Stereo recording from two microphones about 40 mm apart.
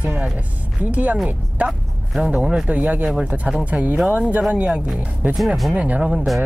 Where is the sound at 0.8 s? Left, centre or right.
Right.